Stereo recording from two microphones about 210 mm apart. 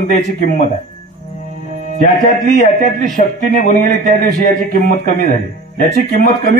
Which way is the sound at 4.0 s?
40° right (ahead or behind).